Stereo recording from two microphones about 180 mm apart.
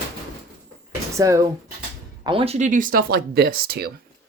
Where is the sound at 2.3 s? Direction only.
30° right (ahead or behind); by 3.9 s 60° right (ahead or behind).